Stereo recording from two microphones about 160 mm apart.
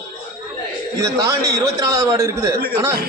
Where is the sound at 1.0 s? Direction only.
20° right (ahead or behind).